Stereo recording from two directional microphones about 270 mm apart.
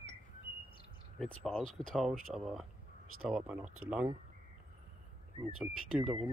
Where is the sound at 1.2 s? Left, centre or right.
Centre.